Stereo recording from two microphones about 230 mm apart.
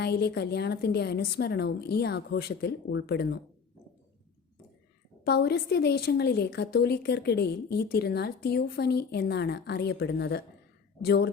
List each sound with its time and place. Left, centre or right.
0.0 s a woman's voice: left
5.2 s a woman's voice: left